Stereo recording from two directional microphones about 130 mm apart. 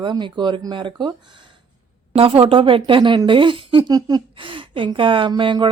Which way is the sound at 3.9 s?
30° right (ahead or behind).